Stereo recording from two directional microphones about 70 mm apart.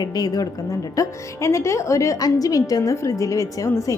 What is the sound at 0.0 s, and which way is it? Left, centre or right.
Speech, left.